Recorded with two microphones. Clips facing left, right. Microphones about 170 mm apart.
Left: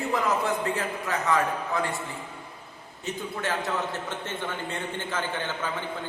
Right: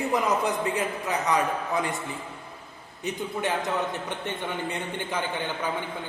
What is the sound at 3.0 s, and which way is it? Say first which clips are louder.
A man's voice: right 2 dB; 15° right (ahead or behind).